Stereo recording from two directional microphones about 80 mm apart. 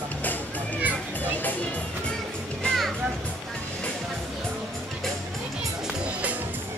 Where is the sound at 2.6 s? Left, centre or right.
Centre.